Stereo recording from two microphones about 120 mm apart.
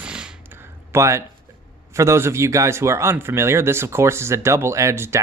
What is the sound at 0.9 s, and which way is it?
A man's voice, 25° right (ahead or behind).